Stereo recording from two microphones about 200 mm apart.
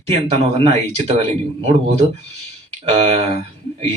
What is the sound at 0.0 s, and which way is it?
Speech, 30° right (ahead or behind).